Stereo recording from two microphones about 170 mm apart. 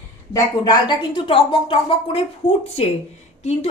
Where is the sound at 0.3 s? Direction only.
25° left (ahead or behind).